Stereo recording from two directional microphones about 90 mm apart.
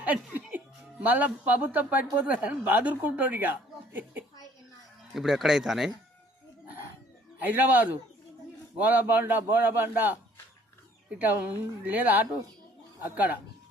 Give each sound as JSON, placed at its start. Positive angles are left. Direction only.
{"t": 0.0, "sound": "speech", "side_deg": -15}
{"t": 5.1, "sound": "speech", "side_deg": -5}
{"t": 7.3, "sound": "a man's voice", "side_deg": -20}